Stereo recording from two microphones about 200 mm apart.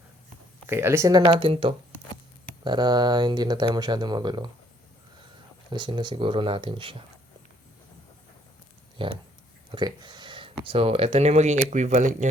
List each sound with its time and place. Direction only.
0.7 s speech: 10° right (ahead or behind)
5.7 s speech: 25° right (ahead or behind)
9.0 s speech: 25° right (ahead or behind)